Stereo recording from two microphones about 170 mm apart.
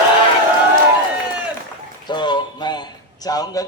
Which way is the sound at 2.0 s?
25° left (ahead or behind).